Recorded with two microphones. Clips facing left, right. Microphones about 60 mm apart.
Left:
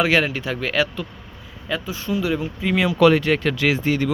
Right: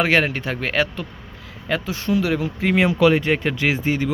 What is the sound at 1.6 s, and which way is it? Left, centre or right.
Speech, right.